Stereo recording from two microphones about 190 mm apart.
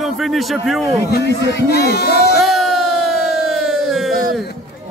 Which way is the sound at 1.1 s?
60° left (ahead or behind).